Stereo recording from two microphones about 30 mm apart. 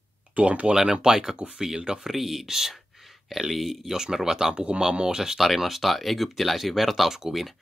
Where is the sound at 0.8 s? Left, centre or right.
Right.